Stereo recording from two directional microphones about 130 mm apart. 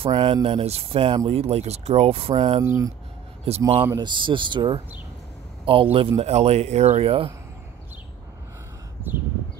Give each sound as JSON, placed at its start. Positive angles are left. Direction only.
{"t": 0.0, "sound": "speech", "side_deg": -45}
{"t": 1.4, "sound": "speech", "side_deg": -55}
{"t": 2.6, "sound": "speech", "side_deg": -25}
{"t": 3.4, "sound": "speech", "side_deg": -50}
{"t": 3.9, "sound": "speech", "side_deg": -35}